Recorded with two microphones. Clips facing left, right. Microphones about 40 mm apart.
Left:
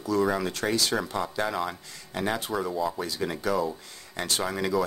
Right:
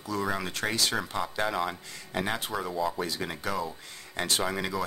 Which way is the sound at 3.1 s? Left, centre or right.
Centre.